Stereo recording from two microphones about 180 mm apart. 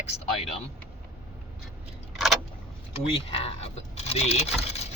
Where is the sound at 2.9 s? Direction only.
30° left (ahead or behind).